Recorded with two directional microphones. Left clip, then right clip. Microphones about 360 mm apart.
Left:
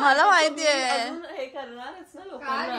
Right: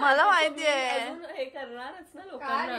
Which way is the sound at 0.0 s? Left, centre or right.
Centre.